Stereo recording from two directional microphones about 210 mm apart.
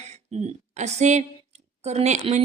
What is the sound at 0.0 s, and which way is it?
A woman's voice, 30° right (ahead or behind).